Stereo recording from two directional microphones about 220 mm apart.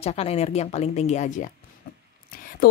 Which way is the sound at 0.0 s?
30° left (ahead or behind).